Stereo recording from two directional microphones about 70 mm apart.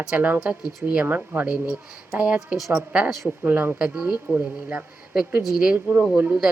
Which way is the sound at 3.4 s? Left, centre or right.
Right.